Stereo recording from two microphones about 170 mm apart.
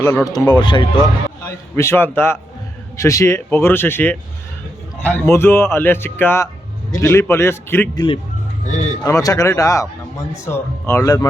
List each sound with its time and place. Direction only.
0.0 s speech: 15° left (ahead or behind)
1.5 s speech: 15° left (ahead or behind)
7.9 s speech: 30° left (ahead or behind)
8.6 s speech: 45° left (ahead or behind)
9.0 s speech: 20° left (ahead or behind)